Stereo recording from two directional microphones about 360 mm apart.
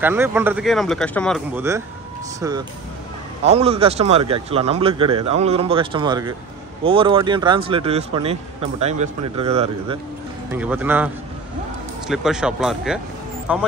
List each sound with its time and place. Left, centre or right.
0.0 s speech: centre
10.5 s speech: centre
12.1 s speech: centre